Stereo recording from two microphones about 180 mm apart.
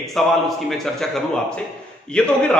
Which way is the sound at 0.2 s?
Centre (ahead or behind).